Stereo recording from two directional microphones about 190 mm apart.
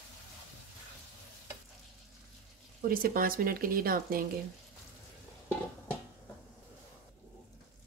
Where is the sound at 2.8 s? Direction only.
50° right (ahead or behind).